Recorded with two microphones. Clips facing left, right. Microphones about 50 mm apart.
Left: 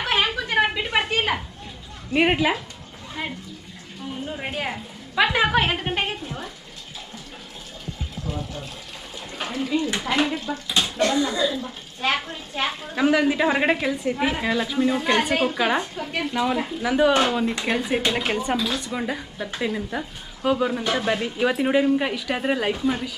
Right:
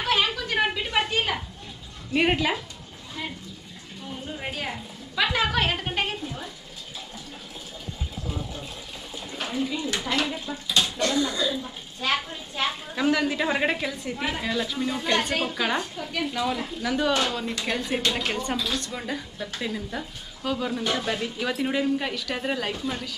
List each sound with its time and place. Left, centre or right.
0.0 s a sound: left
2.1 s speech: centre
3.2 s speech: left
4.3 s speech: centre
9.6 s speech: centre